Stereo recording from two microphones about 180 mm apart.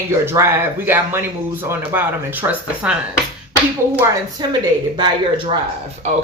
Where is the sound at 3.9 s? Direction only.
15° right (ahead or behind).